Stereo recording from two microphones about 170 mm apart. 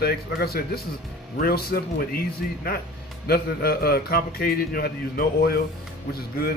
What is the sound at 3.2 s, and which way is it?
A man's voice, 65° left (ahead or behind).